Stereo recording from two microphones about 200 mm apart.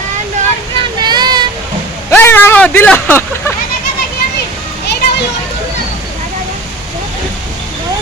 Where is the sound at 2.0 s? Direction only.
10° left (ahead or behind).